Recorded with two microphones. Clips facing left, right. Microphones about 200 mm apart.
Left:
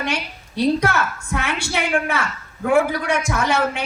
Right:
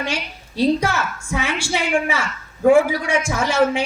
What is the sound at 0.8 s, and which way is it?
A man's voice, 60° left (ahead or behind).